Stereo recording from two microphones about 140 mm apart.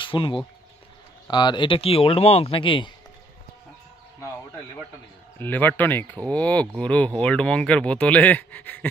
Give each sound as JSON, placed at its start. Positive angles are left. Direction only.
{"t": 0.0, "sound": "speech", "side_deg": 35}
{"t": 5.4, "sound": "speech", "side_deg": 15}